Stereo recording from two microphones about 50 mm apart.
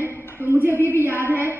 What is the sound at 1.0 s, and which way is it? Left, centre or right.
Mantra, right.